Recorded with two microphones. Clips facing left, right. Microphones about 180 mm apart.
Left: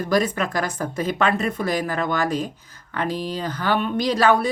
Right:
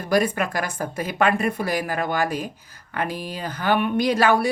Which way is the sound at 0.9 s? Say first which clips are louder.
Even; 10° right (ahead or behind).